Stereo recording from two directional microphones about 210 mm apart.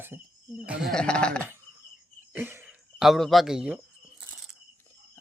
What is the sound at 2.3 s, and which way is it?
Speech, 10° right (ahead or behind).